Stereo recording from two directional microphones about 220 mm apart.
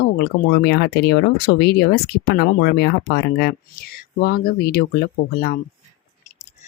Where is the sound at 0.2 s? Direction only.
45° left (ahead or behind).